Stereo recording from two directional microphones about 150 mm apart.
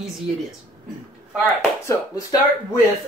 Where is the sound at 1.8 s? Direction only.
20° left (ahead or behind).